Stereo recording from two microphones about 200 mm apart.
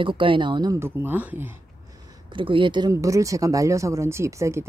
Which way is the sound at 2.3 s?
25° right (ahead or behind).